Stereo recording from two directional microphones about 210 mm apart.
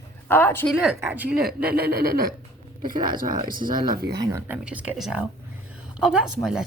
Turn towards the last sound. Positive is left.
turn(degrees=0)  # may be behind; listen again after turning